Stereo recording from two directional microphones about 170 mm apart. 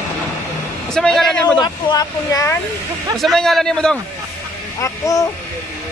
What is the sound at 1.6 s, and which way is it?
Speech, 20° left (ahead or behind).